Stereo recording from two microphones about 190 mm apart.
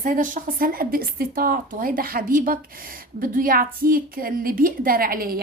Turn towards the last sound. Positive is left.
turn(degrees=-50)  # may be behind; listen again after turning